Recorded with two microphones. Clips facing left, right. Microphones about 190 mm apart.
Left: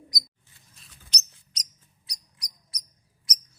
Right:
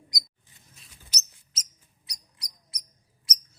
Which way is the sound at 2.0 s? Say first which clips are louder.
Even; 25° right (ahead or behind).